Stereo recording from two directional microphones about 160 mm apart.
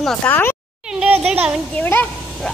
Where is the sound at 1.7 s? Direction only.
10° left (ahead or behind).